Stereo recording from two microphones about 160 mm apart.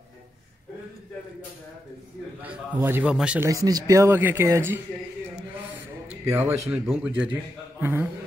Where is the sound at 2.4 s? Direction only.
10° right (ahead or behind).